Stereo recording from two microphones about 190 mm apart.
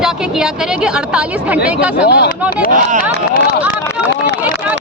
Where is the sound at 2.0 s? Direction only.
65° left (ahead or behind).